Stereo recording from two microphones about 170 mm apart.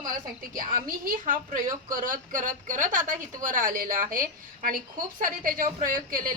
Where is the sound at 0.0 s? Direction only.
55° right (ahead or behind).